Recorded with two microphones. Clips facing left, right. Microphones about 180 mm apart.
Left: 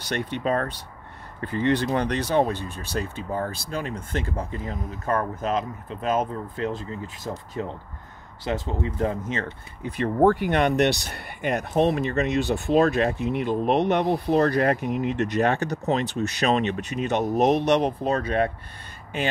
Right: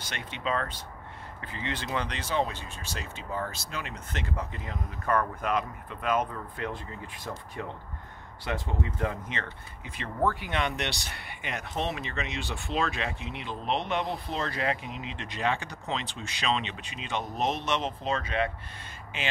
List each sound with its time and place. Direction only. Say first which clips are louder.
0.1 s speech: left 8 dB; 50° left (ahead or behind)
3.3 s speech: left 6 dB; 40° left (ahead or behind)
5.1 s speech: left 3 dB; 25° left (ahead or behind)
7.2 s speech: left 6 dB; 35° left (ahead or behind)
13.9 s speech: left 10 dB; 65° left (ahead or behind)
14.5 s speech: left 9 dB; 45° left (ahead or behind)